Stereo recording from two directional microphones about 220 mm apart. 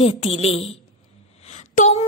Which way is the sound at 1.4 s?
30° left (ahead or behind).